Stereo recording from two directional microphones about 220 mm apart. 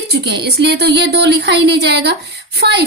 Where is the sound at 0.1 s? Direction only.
50° right (ahead or behind).